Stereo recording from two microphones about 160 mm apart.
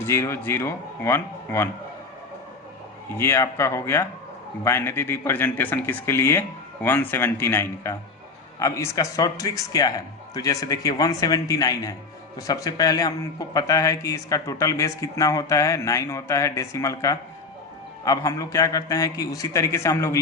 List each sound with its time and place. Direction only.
0.0 s a man's voice: 15° left (ahead or behind)
3.2 s a man's voice: 15° left (ahead or behind)